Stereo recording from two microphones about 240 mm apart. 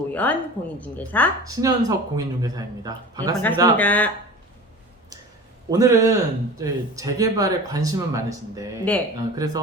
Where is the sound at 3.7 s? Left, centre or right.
Centre.